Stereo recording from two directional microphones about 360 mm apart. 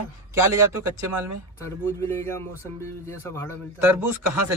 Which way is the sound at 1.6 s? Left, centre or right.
Centre.